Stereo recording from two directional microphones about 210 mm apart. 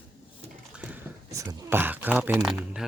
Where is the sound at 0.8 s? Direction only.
10° right (ahead or behind).